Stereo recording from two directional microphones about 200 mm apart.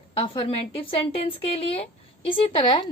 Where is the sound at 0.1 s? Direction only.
30° left (ahead or behind).